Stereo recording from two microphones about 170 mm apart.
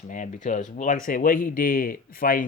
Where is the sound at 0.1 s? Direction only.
50° left (ahead or behind).